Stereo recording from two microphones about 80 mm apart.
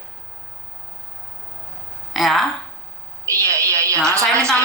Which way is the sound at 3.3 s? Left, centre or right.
Right.